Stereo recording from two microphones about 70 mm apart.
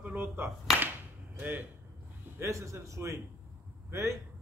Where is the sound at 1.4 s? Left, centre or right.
Right.